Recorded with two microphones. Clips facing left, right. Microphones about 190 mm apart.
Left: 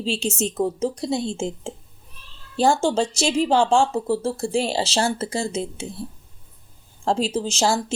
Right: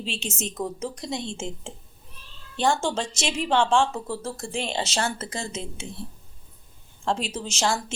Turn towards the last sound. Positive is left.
turn(degrees=30)  # may be behind; listen again after turning